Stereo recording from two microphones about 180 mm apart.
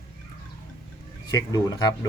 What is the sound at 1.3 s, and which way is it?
Speech, 20° left (ahead or behind).